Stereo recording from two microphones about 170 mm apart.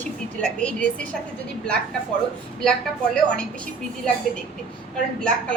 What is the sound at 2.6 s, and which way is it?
Speech, 5° left (ahead or behind).